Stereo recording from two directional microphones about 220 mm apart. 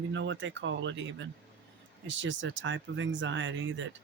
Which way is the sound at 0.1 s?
55° right (ahead or behind).